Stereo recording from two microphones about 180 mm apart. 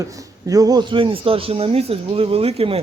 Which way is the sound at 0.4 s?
20° right (ahead or behind).